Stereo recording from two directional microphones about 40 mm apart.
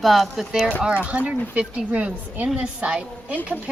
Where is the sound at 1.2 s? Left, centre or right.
Right.